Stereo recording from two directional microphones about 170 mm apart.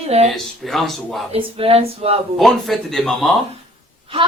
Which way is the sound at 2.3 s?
Centre (ahead or behind).